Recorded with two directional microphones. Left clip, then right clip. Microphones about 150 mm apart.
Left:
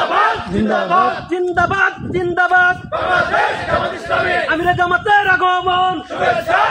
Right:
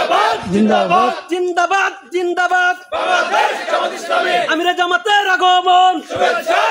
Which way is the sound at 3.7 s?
20° right (ahead or behind).